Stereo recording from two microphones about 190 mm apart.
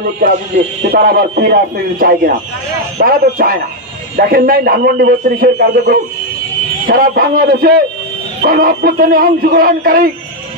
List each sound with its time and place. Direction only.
0.9 s a man's voice: 50° right (ahead or behind)